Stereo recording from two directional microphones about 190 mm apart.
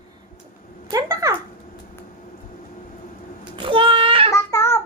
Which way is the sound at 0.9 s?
15° right (ahead or behind).